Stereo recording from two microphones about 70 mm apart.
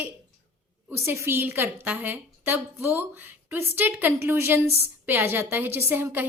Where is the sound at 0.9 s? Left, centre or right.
Right.